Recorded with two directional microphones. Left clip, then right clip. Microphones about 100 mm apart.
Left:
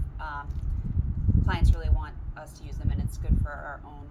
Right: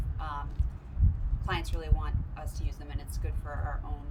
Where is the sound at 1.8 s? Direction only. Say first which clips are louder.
Even; 30° right (ahead or behind).